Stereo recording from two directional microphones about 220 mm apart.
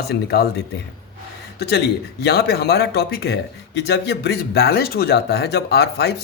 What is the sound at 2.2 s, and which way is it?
Speech, 45° left (ahead or behind).